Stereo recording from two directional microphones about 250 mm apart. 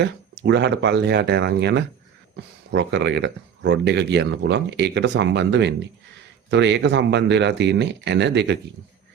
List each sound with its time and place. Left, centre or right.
0.0 s speech: right